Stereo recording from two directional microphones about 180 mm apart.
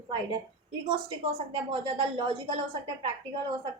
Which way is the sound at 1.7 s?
30° right (ahead or behind).